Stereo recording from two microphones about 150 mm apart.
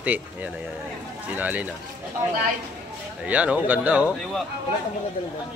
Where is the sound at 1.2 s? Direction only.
10° right (ahead or behind).